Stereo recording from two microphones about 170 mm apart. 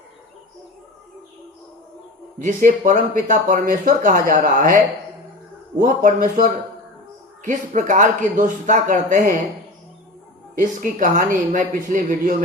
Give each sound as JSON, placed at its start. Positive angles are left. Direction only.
{"t": 2.4, "sound": "speech", "side_deg": -50}
{"t": 5.8, "sound": "speech", "side_deg": -55}
{"t": 10.5, "sound": "speech", "side_deg": -50}